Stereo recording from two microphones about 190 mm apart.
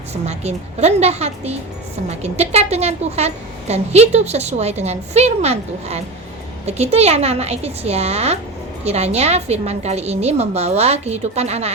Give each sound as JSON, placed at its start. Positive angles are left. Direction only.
{"t": 0.1, "sound": "a woman's voice", "side_deg": -35}